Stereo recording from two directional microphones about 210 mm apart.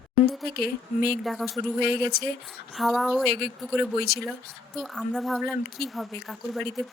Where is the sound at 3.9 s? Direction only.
50° left (ahead or behind).